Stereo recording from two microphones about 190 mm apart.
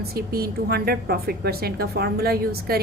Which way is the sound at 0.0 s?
55° right (ahead or behind).